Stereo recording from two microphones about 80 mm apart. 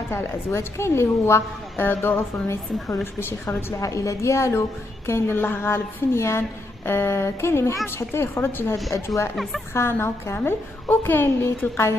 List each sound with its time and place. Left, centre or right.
0.1 s a woman's voice: left
3.8 s a woman's voice: left